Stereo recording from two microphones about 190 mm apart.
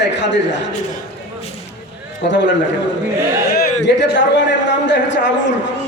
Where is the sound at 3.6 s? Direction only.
65° left (ahead or behind).